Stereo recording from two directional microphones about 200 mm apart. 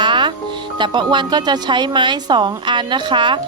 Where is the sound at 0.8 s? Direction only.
25° right (ahead or behind).